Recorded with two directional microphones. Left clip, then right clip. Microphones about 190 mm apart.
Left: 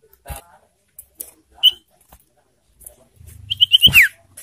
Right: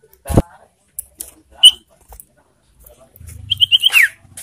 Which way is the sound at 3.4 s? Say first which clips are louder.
Right 1 dB; 10° left (ahead or behind).